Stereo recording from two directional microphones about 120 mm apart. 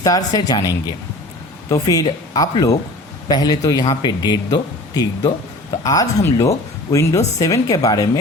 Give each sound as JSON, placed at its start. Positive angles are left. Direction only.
{"t": 0.0, "sound": "a man's voice", "side_deg": 30}